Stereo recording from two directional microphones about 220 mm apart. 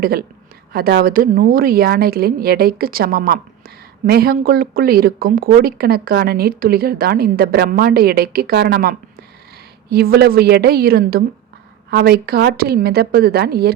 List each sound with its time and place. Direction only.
0.0 s a woman's voice: 45° right (ahead or behind)